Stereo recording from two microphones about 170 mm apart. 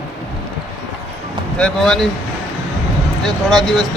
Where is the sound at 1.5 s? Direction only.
5° left (ahead or behind).